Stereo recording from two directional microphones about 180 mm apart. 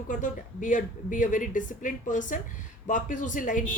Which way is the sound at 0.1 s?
45° left (ahead or behind).